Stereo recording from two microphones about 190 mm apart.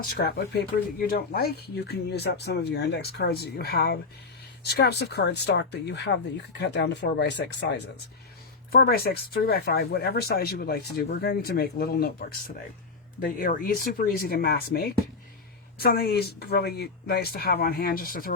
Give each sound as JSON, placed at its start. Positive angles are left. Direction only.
{"t": 0.2, "sound": "speech", "side_deg": 60}
{"t": 8.7, "sound": "speech", "side_deg": 55}